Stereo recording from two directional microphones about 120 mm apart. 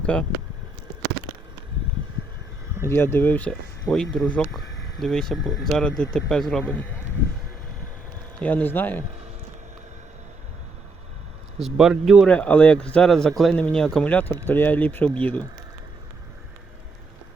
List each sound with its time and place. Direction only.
0.0 s speech: 10° left (ahead or behind)
2.8 s speech: 20° left (ahead or behind)
3.9 s speech: 5° left (ahead or behind)
8.4 s speech: 10° left (ahead or behind)
11.6 s speech: 5° right (ahead or behind)
12.3 s speech: 10° left (ahead or behind)